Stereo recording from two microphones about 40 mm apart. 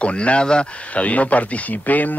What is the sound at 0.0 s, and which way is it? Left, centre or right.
Speech, left.